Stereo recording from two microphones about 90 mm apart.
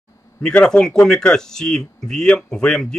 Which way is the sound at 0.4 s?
10° left (ahead or behind).